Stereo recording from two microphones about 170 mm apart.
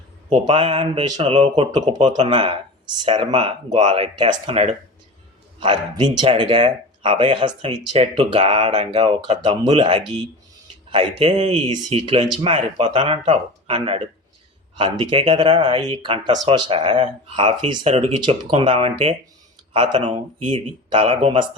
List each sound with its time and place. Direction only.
0.3 s speech: 30° right (ahead or behind)